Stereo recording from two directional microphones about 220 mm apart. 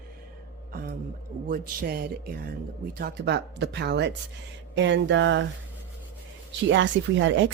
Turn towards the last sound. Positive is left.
turn(degrees=-55)  # may be behind; listen again after turning